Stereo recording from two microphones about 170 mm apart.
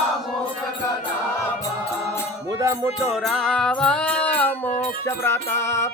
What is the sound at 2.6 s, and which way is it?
Music, 20° right (ahead or behind).